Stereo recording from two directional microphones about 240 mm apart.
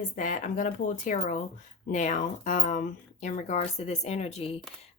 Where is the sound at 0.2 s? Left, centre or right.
Left.